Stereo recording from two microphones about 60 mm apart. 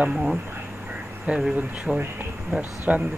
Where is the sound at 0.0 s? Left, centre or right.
Centre.